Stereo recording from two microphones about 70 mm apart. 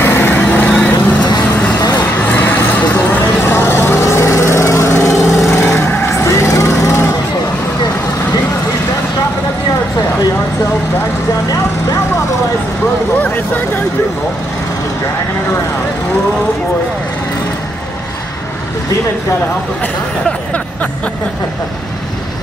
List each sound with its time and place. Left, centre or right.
0.0 s vehicle: left
1.8 s vehicle: left
2.1 s vehicle: left
13.2 s vehicle: left
20.2 s a sound: centre